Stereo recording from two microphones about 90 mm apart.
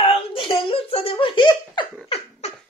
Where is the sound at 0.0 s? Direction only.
85° left; by 2.1 s 65° left (ahead or behind).